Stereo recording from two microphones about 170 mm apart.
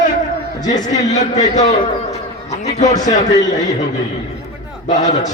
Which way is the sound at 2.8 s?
45° left (ahead or behind).